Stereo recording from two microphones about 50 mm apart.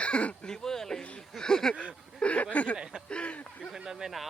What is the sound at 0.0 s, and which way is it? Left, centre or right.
Speech, left.